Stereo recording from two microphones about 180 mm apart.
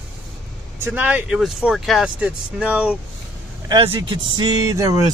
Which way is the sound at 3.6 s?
25° right (ahead or behind).